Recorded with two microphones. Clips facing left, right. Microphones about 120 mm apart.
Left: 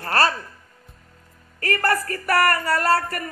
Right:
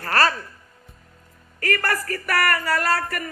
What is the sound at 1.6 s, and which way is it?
Music, 35° left (ahead or behind).